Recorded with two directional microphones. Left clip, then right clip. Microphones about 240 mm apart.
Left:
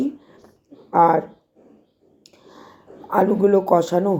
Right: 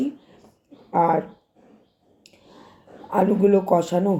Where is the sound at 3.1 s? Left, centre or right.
Centre.